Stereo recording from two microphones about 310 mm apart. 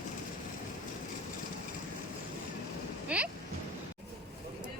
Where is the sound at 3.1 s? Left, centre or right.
Centre.